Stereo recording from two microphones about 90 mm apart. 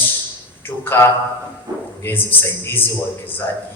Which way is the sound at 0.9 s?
25° left (ahead or behind).